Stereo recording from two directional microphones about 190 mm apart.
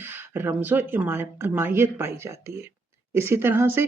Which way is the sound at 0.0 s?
10° right (ahead or behind).